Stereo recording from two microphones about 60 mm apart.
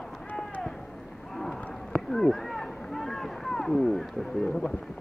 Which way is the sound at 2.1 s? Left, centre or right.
Centre.